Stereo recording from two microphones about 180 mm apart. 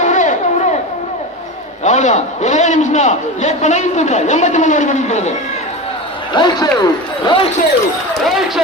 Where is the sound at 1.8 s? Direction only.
40° left (ahead or behind).